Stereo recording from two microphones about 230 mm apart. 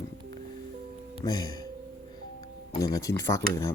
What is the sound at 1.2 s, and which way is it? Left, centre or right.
Speech, centre.